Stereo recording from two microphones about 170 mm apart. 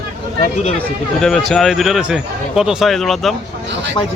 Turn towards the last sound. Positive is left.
turn(degrees=0)  # may be behind; listen again after turning